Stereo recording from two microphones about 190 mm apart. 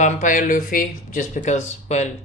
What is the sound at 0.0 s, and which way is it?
A woman's voice, 40° left (ahead or behind).